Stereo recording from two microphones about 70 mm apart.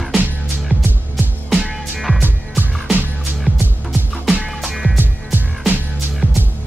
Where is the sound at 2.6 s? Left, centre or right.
Right.